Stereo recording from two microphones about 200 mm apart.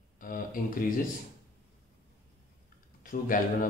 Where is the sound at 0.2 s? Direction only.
45° left (ahead or behind).